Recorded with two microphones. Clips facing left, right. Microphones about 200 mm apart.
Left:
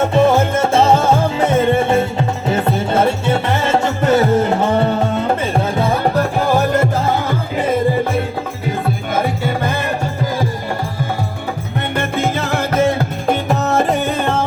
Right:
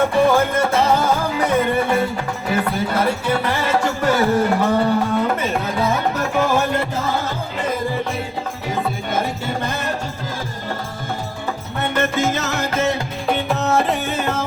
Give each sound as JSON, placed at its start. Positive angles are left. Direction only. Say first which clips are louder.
{"t": 0.0, "sound": "music", "louder": "left 2 dB", "side_deg": 25}
{"t": 7.3, "sound": "music", "louder": "left 6 dB", "side_deg": 55}
{"t": 11.9, "sound": "music", "louder": "left 1 dB", "side_deg": 55}